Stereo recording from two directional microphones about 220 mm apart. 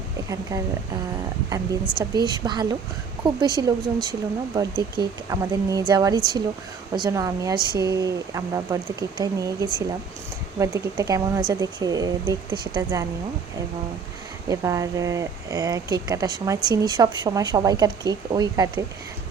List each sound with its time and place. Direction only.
0.5 s a woman's voice: 15° right (ahead or behind)
2.0 s a woman's voice: 20° right (ahead or behind)
14.4 s a woman's voice: 15° right (ahead or behind)